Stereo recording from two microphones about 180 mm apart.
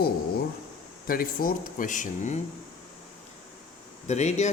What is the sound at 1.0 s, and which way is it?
Speech, 50° left (ahead or behind).